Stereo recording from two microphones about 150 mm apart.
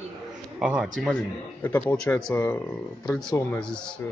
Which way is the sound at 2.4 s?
15° left (ahead or behind).